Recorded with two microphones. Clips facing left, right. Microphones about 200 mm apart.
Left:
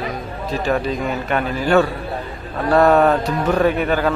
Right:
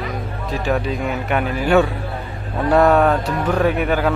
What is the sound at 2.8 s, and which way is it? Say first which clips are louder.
Music: left 1 dB; 5° left (ahead or behind).